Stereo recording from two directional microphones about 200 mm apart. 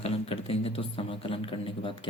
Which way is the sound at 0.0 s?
30° left (ahead or behind).